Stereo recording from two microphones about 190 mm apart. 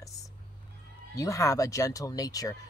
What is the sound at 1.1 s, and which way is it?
Speech, 15° left (ahead or behind).